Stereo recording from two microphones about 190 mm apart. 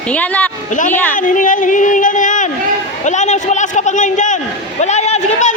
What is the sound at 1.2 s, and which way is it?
A man's voice, 45° left (ahead or behind).